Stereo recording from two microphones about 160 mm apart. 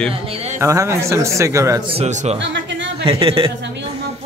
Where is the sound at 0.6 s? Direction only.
20° right (ahead or behind).